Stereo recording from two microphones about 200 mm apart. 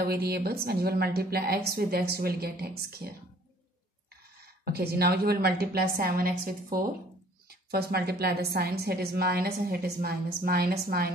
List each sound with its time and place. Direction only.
0.0 s a woman's voice: 50° right (ahead or behind)
4.6 s a woman's voice: 50° right (ahead or behind)